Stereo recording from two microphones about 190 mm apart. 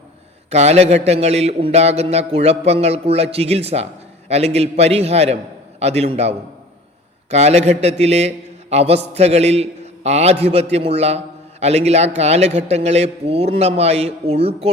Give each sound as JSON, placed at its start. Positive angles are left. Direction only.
{"t": 0.5, "sound": "speech", "side_deg": -35}